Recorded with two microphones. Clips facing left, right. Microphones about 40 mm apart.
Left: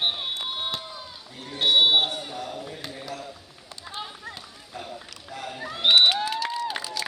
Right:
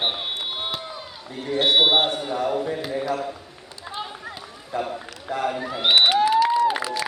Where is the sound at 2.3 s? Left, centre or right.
Right.